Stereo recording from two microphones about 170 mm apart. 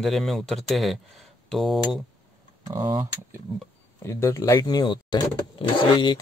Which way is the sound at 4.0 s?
15° left (ahead or behind).